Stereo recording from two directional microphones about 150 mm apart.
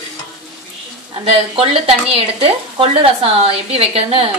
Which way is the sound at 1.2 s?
35° right (ahead or behind).